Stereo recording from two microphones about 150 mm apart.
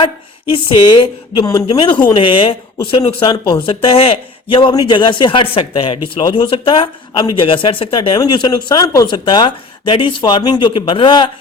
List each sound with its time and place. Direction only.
0.5 s speech: 30° left (ahead or behind)